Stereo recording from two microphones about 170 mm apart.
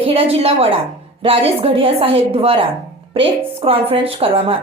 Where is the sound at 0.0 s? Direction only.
35° right (ahead or behind).